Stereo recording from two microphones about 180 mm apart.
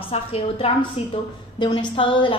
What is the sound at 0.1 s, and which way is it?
A woman's voice, 30° left (ahead or behind).